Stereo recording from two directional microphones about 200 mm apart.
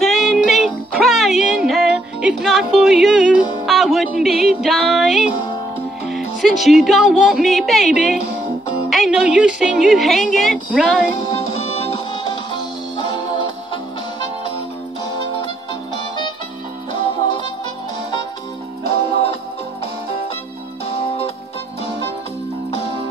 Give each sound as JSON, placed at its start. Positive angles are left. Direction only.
{"t": 0.0, "sound": "music", "side_deg": 0}
{"t": 3.6, "sound": "speech", "side_deg": 0}
{"t": 4.6, "sound": "music", "side_deg": 0}
{"t": 6.6, "sound": "a woman's voice", "side_deg": 0}
{"t": 12.3, "sound": "music", "side_deg": 25}